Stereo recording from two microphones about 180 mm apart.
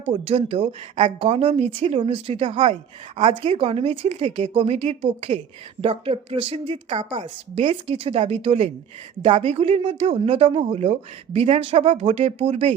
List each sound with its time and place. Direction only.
0.0 s a woman's voice: 30° right (ahead or behind)